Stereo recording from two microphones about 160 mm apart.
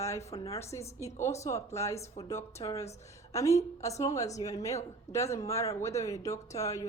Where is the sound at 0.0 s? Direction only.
20° left (ahead or behind).